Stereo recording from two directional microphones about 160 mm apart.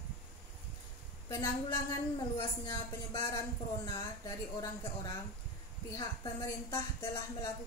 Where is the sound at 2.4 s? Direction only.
25° left (ahead or behind).